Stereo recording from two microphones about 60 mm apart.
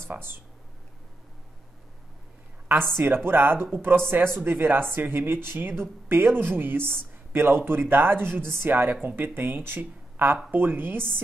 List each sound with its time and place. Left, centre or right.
0.0 s speech: right
3.3 s speech: right